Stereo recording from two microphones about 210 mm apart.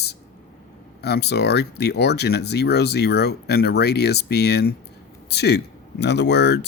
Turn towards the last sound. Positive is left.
turn(degrees=55)  # may be behind; listen again after turning